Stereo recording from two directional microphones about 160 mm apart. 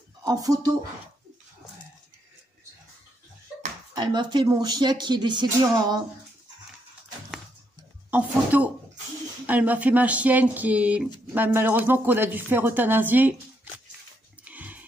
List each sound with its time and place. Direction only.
0.2 s speech: 25° right (ahead or behind)
3.9 s speech: 25° right (ahead or behind)
8.1 s speech: 10° right (ahead or behind)
14.4 s dog: 10° right (ahead or behind)